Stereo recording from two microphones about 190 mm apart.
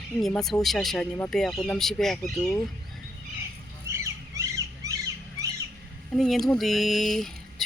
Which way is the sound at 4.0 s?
15° right (ahead or behind).